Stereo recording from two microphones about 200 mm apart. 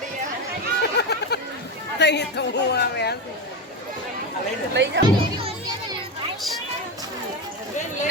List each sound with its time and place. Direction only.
0.8 s a sound: 55° left (ahead or behind)
2.0 s speech: 60° left (ahead or behind)
4.7 s speech: 60° right (ahead or behind)
5.2 s music: 25° right (ahead or behind)